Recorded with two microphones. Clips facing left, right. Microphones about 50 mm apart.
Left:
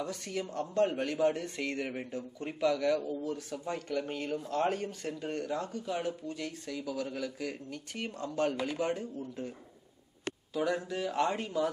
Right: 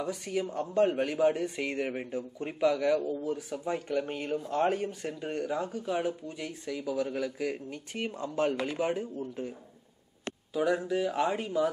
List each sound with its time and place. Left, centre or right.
0.0 s speech: centre
10.5 s speech: centre